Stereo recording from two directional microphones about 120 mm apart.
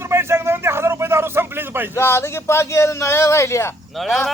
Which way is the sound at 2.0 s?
20° left (ahead or behind).